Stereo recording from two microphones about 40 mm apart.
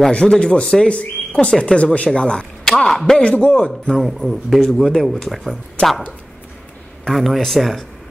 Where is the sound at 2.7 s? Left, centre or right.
Centre.